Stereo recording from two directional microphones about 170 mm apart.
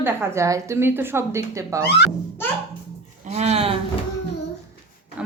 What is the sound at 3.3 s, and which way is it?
Speech, 40° right (ahead or behind).